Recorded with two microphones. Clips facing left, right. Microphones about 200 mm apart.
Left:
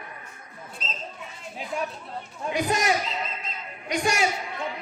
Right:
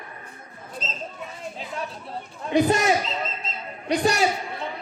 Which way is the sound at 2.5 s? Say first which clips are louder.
Right 5 dB; 30° right (ahead or behind).